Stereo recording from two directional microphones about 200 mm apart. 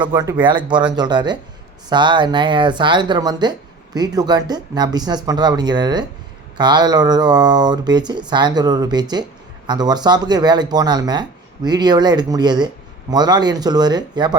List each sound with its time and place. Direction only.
0.0 s speech: 20° right (ahead or behind)